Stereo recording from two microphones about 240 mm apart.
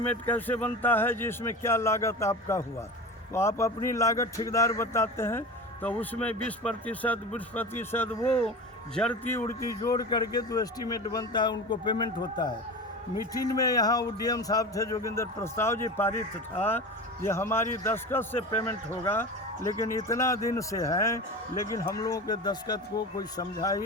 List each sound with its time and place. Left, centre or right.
0.0 s a man's voice: centre